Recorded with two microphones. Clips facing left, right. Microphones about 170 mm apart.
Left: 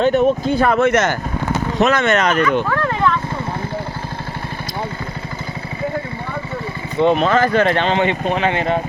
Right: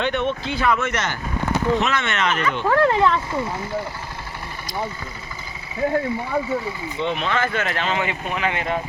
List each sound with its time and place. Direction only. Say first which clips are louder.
0.0 s speech: left 8 dB; 40° left (ahead or behind)
2.6 s speech: right 2 dB; 25° right (ahead or behind)
7.0 s speech: left 9 dB; 45° left (ahead or behind)